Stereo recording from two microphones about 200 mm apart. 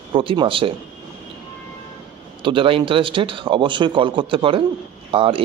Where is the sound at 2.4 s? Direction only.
25° right (ahead or behind).